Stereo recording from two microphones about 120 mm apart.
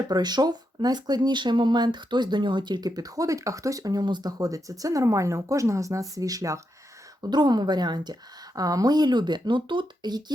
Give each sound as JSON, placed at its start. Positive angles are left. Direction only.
{"t": 0.1, "sound": "speech", "side_deg": -35}